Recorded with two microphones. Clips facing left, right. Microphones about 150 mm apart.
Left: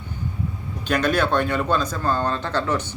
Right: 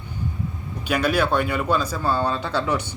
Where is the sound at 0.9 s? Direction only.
10° right (ahead or behind).